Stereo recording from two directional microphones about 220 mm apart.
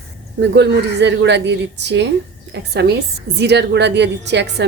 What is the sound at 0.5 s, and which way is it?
Speech, 50° right (ahead or behind).